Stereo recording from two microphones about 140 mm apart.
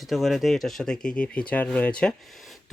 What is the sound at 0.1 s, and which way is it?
Speech, centre (ahead or behind).